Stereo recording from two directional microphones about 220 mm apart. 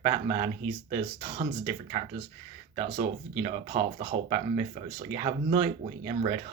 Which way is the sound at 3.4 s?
20° right (ahead or behind).